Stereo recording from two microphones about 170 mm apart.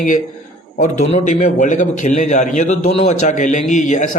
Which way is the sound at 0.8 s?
40° left (ahead or behind).